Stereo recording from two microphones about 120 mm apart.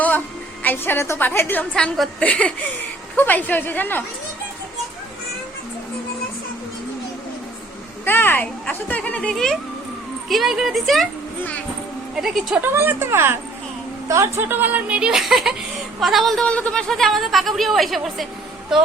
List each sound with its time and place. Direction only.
0.6 s a woman's voice: 15° left (ahead or behind)
8.0 s a woman's voice: 20° left (ahead or behind); by 11.0 s centre (ahead or behind)
12.1 s a woman's voice: 5° right (ahead or behind)
12.6 s a woman's voice: 20° right (ahead or behind); by 18.3 s centre (ahead or behind)